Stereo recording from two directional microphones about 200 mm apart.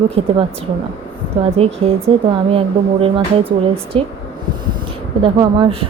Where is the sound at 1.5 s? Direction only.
30° right (ahead or behind).